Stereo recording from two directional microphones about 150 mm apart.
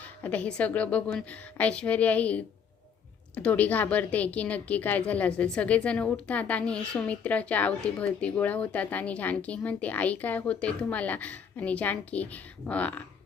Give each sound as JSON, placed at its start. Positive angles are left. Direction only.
{"t": 0.2, "sound": "a woman's voice", "side_deg": 10}